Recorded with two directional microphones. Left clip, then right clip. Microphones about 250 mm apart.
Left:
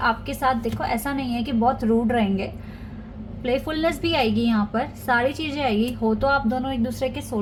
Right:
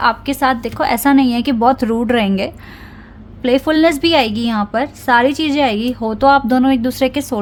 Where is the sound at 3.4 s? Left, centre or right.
Right.